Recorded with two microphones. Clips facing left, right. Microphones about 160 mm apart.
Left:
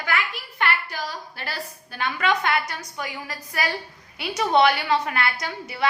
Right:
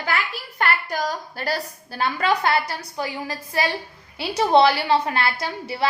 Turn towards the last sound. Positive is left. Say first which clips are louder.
# right 2 dB
turn(degrees=-30)  # may be behind; listen again after turning